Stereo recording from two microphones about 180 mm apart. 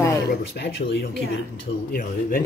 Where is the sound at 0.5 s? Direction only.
65° left (ahead or behind).